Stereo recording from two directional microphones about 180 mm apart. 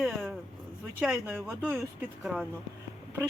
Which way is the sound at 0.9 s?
5° right (ahead or behind).